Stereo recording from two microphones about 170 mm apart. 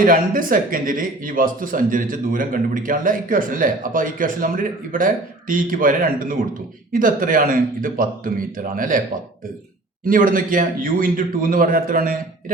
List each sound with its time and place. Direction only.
0.0 s speech: 55° right (ahead or behind)
10.1 s speech: 55° right (ahead or behind)